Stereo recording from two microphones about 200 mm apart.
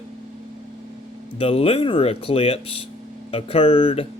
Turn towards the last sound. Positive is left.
turn(degrees=25)  # may be behind; listen again after turning